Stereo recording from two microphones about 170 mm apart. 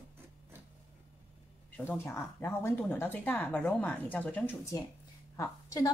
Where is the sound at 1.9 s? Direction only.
15° left (ahead or behind).